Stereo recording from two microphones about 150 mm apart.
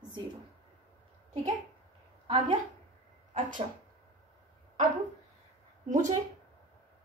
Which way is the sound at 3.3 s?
60° right (ahead or behind).